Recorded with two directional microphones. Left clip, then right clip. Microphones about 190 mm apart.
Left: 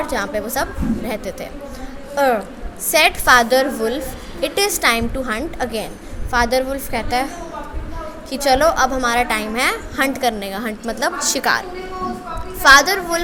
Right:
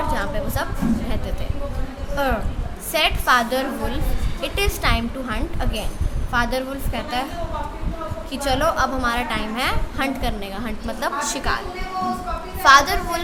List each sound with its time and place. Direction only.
0.1 s a woman's voice: 30° left (ahead or behind)
8.3 s a woman's voice: 30° left (ahead or behind)
12.6 s a woman's voice: 25° left (ahead or behind)